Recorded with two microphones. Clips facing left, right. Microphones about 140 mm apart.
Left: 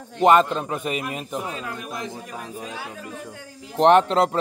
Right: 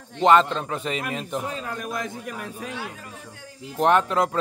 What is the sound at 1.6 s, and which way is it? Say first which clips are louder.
A man's voice: right 2 dB; 45° right (ahead or behind).